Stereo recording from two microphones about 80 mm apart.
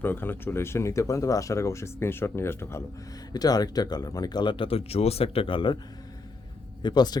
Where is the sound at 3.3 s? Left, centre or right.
Left.